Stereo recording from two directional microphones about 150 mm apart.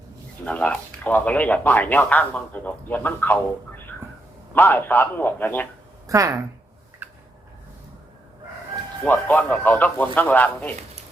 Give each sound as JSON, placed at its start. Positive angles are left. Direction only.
{"t": 0.4, "sound": "speech", "side_deg": 5}
{"t": 4.5, "sound": "speech", "side_deg": 10}
{"t": 6.1, "sound": "speech", "side_deg": -20}
{"t": 7.0, "sound": "a sound", "side_deg": -15}
{"t": 9.0, "sound": "speech", "side_deg": 10}